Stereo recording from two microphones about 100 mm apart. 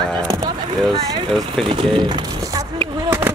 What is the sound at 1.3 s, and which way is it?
Speech, 5° left (ahead or behind).